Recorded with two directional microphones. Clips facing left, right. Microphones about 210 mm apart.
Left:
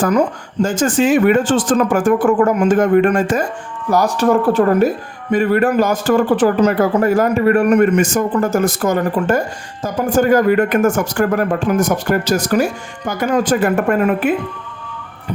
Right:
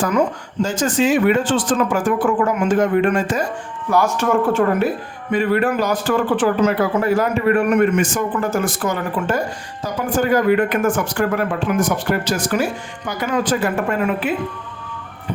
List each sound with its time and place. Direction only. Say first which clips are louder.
0.6 s speech: left 3 dB; 50° left (ahead or behind)
3.8 s speech: left 3 dB; 35° left (ahead or behind)